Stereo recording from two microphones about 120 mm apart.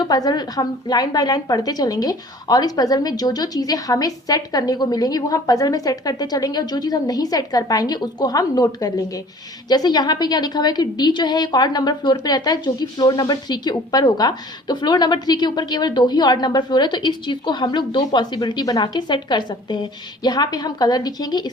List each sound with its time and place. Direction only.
0.0 s speech: 35° left (ahead or behind)